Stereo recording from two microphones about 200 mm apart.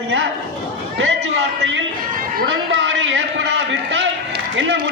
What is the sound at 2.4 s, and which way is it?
A man's voice, 65° right (ahead or behind).